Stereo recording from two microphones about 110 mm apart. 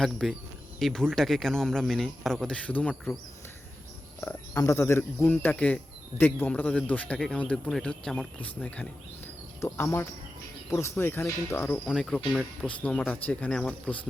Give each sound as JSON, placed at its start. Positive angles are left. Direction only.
{"t": 0.0, "sound": "speech", "side_deg": 5}
{"t": 4.2, "sound": "speech", "side_deg": 20}
{"t": 11.9, "sound": "speech", "side_deg": 0}